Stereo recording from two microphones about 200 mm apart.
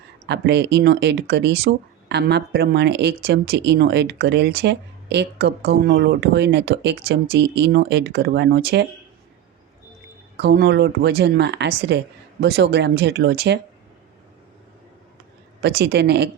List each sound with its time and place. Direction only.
0.3 s speech: 60° right (ahead or behind)
10.3 s speech: 55° right (ahead or behind)
15.6 s speech: 55° right (ahead or behind)